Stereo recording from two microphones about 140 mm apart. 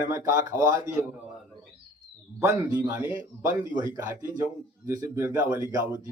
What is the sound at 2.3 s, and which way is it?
A man's voice, 15° right (ahead or behind).